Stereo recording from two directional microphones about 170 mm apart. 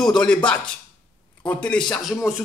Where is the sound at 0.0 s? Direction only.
5° left (ahead or behind).